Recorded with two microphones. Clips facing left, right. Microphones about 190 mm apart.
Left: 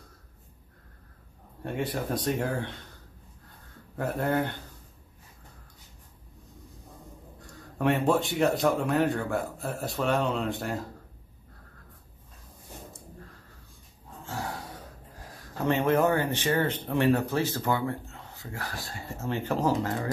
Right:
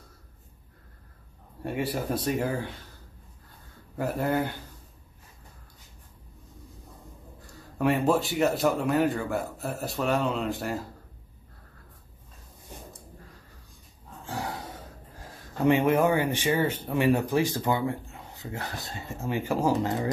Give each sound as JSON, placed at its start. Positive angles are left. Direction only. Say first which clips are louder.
{"t": 1.6, "sound": "speech", "louder": "right 1 dB", "side_deg": -5}
{"t": 3.9, "sound": "a man's voice", "louder": "right 1 dB", "side_deg": -5}
{"t": 7.8, "sound": "a man's voice", "louder": "right 1 dB", "side_deg": 0}
{"t": 14.2, "sound": "a sound", "louder": "right 2 dB", "side_deg": -20}
{"t": 15.6, "sound": "speech", "louder": "right 2 dB", "side_deg": -10}